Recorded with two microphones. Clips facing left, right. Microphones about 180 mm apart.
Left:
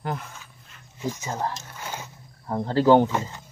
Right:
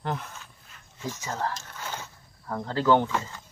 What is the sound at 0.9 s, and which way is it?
Speech, 15° left (ahead or behind).